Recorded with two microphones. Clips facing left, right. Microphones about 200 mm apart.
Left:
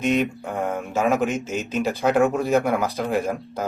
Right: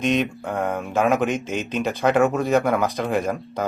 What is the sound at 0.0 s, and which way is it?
Speech, centre (ahead or behind).